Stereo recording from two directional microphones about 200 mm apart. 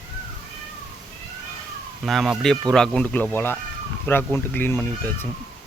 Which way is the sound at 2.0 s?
Centre (ahead or behind).